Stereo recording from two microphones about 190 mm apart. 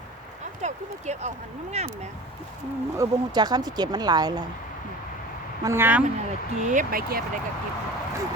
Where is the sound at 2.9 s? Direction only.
20° right (ahead or behind).